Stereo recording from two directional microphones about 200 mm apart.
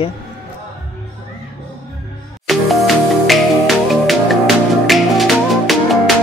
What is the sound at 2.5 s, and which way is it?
Music, centre (ahead or behind).